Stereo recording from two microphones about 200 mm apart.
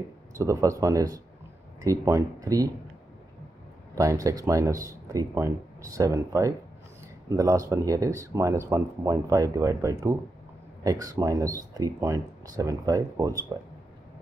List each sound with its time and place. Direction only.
0.4 s speech: 15° right (ahead or behind)
3.9 s speech: 15° right (ahead or behind)